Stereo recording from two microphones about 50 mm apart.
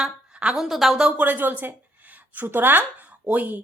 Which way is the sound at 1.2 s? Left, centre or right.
Right.